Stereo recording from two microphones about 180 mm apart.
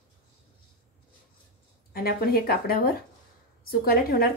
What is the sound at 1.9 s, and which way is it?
A woman's voice, 55° left (ahead or behind).